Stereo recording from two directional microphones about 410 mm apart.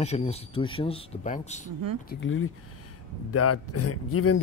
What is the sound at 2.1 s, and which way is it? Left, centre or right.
A man's voice, left.